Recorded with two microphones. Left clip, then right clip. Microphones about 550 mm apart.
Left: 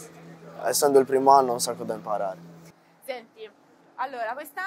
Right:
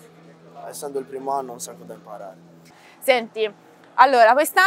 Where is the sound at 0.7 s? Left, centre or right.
Left.